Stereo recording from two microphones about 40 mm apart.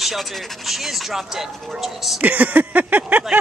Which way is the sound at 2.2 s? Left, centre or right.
Right.